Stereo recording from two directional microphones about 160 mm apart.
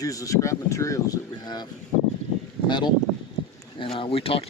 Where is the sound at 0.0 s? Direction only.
20° left (ahead or behind).